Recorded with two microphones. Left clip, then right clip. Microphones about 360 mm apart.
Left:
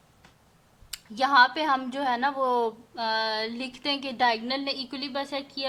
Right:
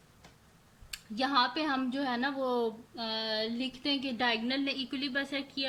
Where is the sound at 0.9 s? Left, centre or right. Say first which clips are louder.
Left 8 dB; centre.